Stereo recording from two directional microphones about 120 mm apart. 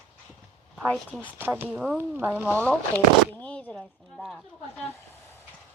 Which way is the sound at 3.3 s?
10° left (ahead or behind).